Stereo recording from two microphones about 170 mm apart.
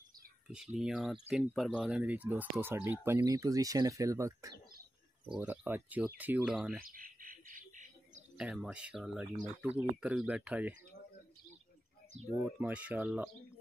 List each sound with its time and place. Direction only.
0.5 s speech: 5° right (ahead or behind)
5.3 s speech: 5° right (ahead or behind)
6.8 s a sound: 55° right (ahead or behind)
8.4 s speech: 5° right (ahead or behind)
12.5 s speech: 10° right (ahead or behind)